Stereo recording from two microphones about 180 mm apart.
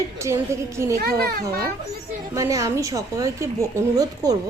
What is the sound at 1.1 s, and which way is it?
Speech, 60° right (ahead or behind).